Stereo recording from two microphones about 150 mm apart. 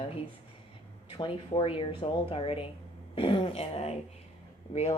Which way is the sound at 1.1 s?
35° left (ahead or behind).